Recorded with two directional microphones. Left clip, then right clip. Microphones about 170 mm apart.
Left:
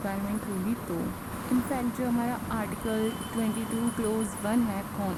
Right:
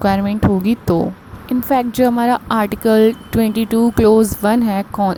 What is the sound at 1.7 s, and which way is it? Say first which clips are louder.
A woman's voice: right 16 dB; 55° right (ahead or behind).